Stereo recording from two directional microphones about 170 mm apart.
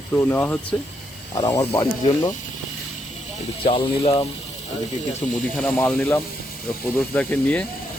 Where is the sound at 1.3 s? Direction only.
20° left (ahead or behind).